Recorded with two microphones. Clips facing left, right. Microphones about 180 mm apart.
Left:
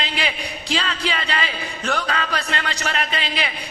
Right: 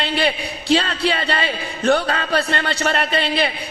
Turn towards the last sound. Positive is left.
turn(degrees=-35)  # may be behind; listen again after turning